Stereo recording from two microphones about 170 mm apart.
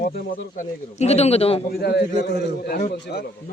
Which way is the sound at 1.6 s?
70° left (ahead or behind).